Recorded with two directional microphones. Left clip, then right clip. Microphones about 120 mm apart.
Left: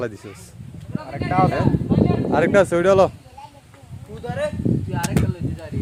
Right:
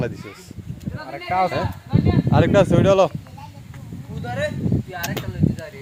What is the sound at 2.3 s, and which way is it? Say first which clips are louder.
Speech: even; 50° left (ahead or behind).